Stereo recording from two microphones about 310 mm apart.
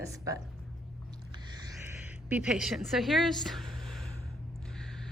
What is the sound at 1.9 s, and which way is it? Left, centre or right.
A woman's voice, centre.